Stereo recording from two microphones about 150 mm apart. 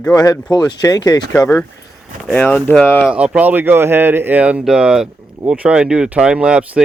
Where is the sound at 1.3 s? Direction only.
15° left (ahead or behind).